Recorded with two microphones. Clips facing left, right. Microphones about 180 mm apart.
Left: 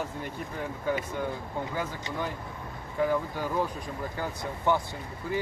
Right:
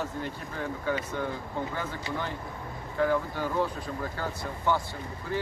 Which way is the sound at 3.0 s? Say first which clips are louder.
Right 1 dB; 10° left (ahead or behind).